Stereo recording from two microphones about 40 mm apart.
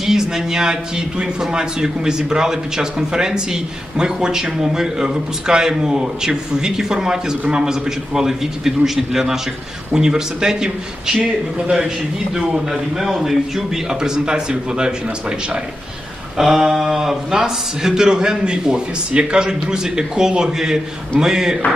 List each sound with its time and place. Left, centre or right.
0.0 s a man's voice: centre
12.5 s a man's voice: centre
16.4 s a man's voice: centre